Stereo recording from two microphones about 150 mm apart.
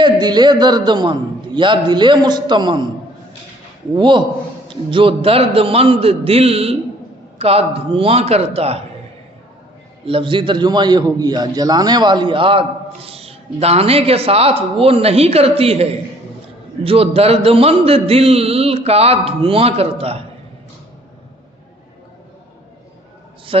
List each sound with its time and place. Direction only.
0.0 s a man's voice: 30° right (ahead or behind)
3.9 s a man's voice: 30° right (ahead or behind)
10.1 s a man's voice: 35° right (ahead or behind)